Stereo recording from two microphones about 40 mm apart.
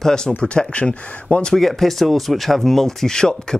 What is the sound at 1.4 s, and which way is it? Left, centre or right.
Speech, centre.